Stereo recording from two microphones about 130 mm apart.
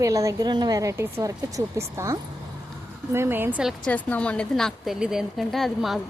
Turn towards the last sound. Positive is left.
turn(degrees=0)  # may be behind; listen again after turning